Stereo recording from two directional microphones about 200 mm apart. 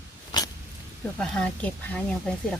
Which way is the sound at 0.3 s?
20° left (ahead or behind).